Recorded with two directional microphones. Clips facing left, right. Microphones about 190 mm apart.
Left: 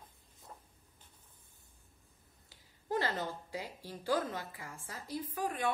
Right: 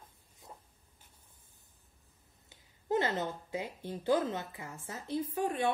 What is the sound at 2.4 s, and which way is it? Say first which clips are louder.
Speech: right 5 dB; 20° right (ahead or behind).